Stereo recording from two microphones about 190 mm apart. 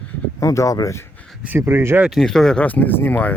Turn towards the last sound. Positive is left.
turn(degrees=10)  # may be behind; listen again after turning